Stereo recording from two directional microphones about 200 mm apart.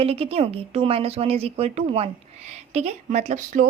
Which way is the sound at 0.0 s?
30° right (ahead or behind).